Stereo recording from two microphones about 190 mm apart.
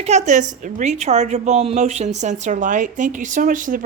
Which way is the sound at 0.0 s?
35° right (ahead or behind).